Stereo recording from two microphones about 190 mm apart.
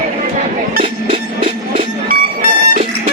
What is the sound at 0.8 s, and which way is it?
Train, 30° right (ahead or behind).